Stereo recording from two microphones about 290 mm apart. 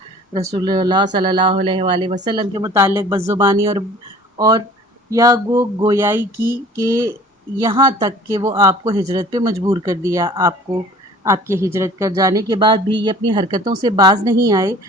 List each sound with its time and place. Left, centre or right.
0.5 s speech: centre